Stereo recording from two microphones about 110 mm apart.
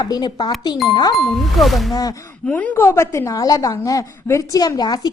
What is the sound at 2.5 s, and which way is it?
A woman's voice, 15° left (ahead or behind).